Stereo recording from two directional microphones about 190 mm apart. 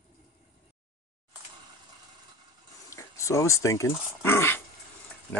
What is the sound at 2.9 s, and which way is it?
Speech, 15° left (ahead or behind).